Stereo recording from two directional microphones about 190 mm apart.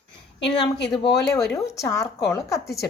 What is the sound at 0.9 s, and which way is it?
Speech, 20° left (ahead or behind).